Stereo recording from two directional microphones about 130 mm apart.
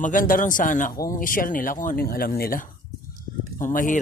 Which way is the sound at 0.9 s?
25° left (ahead or behind).